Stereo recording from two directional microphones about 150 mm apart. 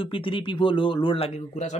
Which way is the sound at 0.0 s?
35° left (ahead or behind).